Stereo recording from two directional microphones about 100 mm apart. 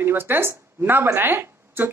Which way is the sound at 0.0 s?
20° right (ahead or behind).